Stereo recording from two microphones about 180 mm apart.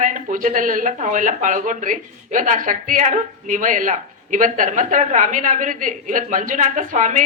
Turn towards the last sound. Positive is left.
turn(degrees=-45)  # may be behind; listen again after turning